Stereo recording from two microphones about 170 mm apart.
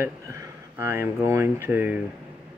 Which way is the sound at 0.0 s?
15° right (ahead or behind).